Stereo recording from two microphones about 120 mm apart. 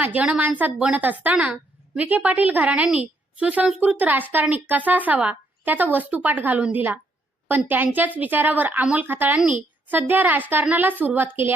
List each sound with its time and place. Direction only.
0.0 s a woman's voice: 10° right (ahead or behind)